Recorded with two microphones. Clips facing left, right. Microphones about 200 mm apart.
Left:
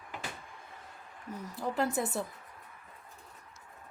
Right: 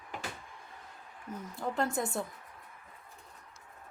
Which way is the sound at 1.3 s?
Centre (ahead or behind).